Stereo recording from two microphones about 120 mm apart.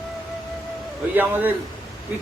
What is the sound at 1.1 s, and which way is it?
Speech, 15° right (ahead or behind).